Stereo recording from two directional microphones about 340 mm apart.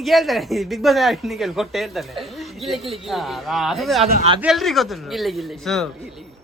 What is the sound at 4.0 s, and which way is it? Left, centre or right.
Speech, centre.